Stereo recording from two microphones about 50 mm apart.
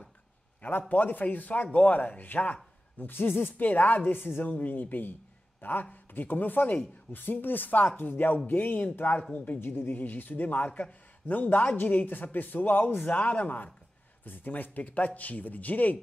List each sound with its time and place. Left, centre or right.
0.6 s a man's voice: left
9.6 s a man's voice: left